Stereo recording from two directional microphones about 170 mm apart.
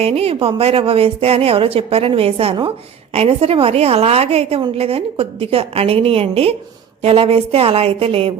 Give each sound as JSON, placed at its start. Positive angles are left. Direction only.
{"t": 0.0, "sound": "a woman's voice", "side_deg": -35}